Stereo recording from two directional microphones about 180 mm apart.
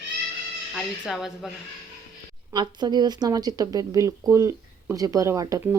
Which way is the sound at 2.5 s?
25° right (ahead or behind).